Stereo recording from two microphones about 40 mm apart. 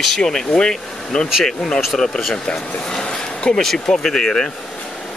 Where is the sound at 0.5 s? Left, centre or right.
Left.